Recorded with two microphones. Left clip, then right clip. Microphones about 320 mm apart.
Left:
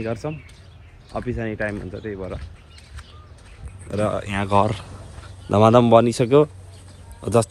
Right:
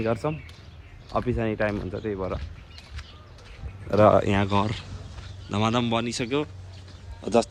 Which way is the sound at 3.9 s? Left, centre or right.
Centre.